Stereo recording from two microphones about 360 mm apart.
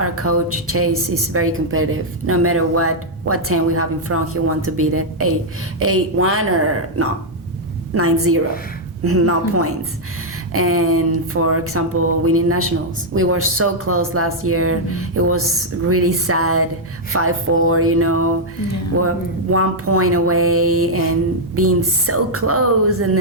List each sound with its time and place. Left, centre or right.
0.0 s a woman's voice: right